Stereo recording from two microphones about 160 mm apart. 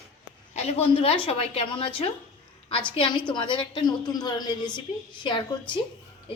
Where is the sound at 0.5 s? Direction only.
40° left (ahead or behind).